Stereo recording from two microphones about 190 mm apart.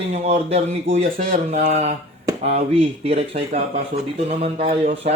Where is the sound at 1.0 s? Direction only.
50° right (ahead or behind).